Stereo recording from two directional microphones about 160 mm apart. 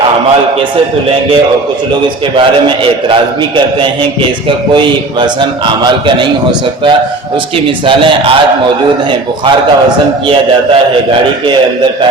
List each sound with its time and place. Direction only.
2.3 s a man's voice: 30° right (ahead or behind)
5.2 s a man's voice: 30° right (ahead or behind)
7.9 s a man's voice: 35° right (ahead or behind)